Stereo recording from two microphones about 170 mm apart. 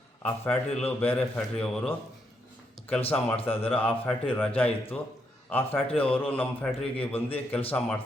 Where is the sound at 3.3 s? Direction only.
35° left (ahead or behind).